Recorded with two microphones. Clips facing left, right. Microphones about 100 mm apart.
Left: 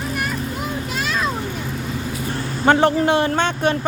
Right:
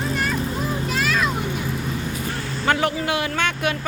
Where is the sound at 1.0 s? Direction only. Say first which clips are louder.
Right 1 dB; 30° left (ahead or behind).